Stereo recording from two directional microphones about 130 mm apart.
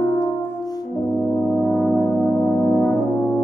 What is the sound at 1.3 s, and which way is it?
Brass instrument, 20° left (ahead or behind).